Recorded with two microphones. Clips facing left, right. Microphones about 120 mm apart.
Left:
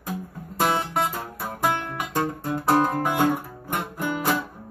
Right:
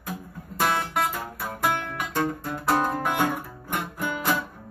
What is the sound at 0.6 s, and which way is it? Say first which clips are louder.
Music: left 2 dB; 25° left (ahead or behind).